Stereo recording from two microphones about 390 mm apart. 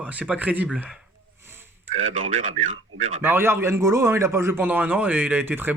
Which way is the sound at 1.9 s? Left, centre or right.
Right.